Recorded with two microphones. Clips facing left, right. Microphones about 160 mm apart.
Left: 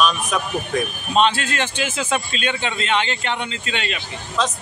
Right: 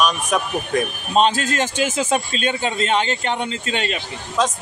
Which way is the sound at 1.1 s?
40° right (ahead or behind).